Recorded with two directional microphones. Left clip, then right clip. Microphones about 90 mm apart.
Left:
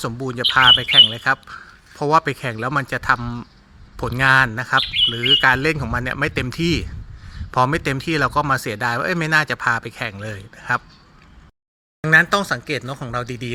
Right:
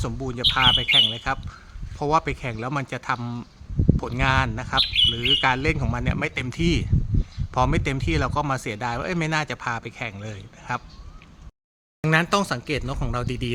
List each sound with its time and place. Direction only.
0.0 s speech: 40° left (ahead or behind)
3.2 s speech: 25° left (ahead or behind)
3.9 s speech: 45° left (ahead or behind)
12.0 s speech: 15° right (ahead or behind)